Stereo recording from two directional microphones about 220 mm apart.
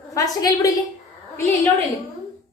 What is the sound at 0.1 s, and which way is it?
Speech, 15° left (ahead or behind).